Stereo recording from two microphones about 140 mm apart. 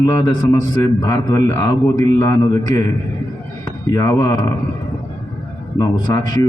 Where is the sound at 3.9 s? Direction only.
20° left (ahead or behind).